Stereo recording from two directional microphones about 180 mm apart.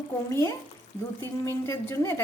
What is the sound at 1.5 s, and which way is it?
Speech, 15° left (ahead or behind).